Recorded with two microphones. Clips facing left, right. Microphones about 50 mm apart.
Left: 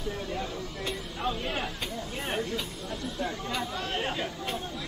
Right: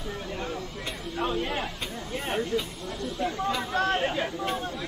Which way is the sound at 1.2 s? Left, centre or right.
Right.